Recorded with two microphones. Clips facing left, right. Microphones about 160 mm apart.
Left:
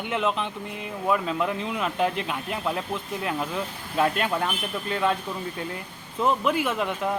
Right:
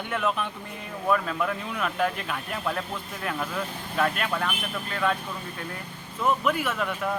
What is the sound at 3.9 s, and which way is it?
Speech, 25° left (ahead or behind).